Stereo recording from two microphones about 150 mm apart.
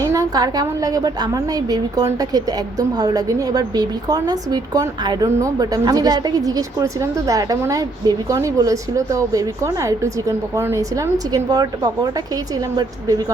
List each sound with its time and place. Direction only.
0.0 s a woman's voice: 20° right (ahead or behind)